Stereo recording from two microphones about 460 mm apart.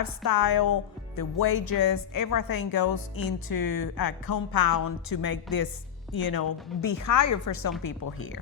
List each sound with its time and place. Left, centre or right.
0.0 s speech: left